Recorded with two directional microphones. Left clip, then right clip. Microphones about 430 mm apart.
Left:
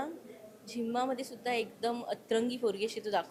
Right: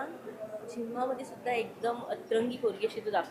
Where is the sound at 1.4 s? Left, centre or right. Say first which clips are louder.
Right 2 dB; left.